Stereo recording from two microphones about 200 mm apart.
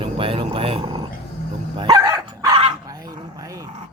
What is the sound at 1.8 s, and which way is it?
Dog, 20° right (ahead or behind).